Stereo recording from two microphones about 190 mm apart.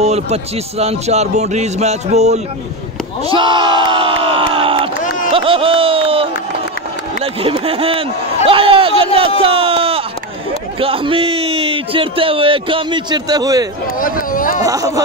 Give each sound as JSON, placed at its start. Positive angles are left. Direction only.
{"t": 0.0, "sound": "a man's voice", "side_deg": -35}
{"t": 3.3, "sound": "a man's voice", "side_deg": -25}
{"t": 7.3, "sound": "a man's voice", "side_deg": -30}
{"t": 13.8, "sound": "speech", "side_deg": 45}
{"t": 14.6, "sound": "a man's voice", "side_deg": -20}